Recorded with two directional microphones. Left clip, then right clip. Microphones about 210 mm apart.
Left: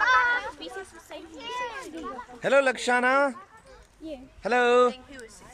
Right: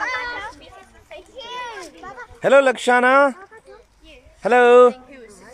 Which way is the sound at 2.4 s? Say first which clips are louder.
Right 8 dB; 10° right (ahead or behind).